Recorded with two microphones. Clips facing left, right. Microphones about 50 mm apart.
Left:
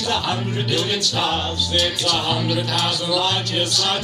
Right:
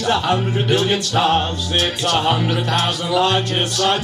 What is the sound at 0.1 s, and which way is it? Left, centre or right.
Music, right.